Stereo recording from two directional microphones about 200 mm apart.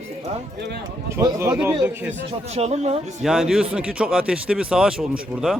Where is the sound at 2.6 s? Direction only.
35° right (ahead or behind).